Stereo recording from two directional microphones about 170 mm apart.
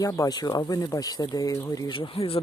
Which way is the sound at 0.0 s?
20° left (ahead or behind).